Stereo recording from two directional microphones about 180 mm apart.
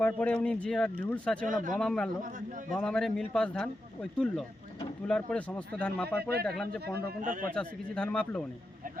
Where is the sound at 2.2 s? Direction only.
45° right (ahead or behind).